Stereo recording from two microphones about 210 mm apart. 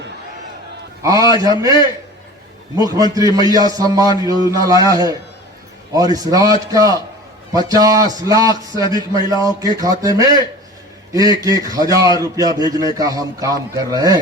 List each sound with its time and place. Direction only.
1.0 s a man's voice: 15° right (ahead or behind)